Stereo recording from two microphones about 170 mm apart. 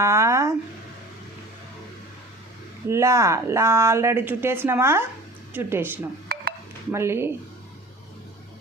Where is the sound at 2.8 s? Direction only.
15° right (ahead or behind).